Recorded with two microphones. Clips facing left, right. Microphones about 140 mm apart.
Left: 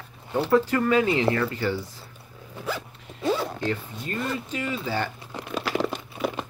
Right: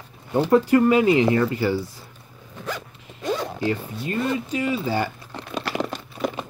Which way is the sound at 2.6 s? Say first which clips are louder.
Even; 5° left (ahead or behind).